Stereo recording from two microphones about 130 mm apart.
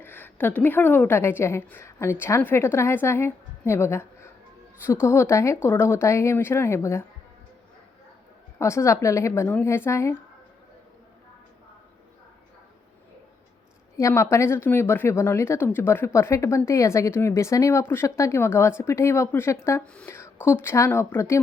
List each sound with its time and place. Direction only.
0.0 s a woman's voice: 15° left (ahead or behind)
8.5 s speech: 20° left (ahead or behind)
14.1 s speech: 20° left (ahead or behind)